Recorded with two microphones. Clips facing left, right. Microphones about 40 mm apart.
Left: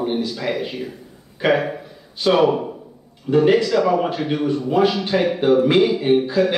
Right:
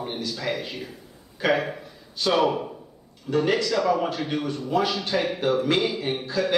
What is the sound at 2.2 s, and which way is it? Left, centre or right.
Speech, centre.